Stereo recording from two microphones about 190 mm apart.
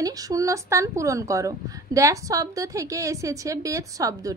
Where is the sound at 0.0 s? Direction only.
20° right (ahead or behind).